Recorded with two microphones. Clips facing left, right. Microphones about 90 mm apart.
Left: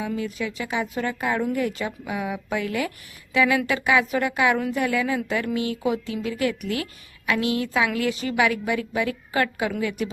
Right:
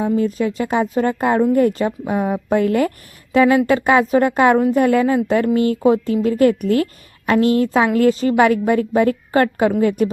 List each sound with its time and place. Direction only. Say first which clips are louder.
0.2 s a woman's voice: right 10 dB; 40° right (ahead or behind)